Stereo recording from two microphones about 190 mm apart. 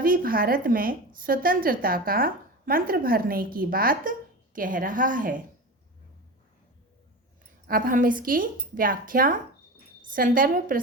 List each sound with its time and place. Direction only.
0.0 s a woman's voice: 50° right (ahead or behind)
7.7 s a woman's voice: 45° right (ahead or behind)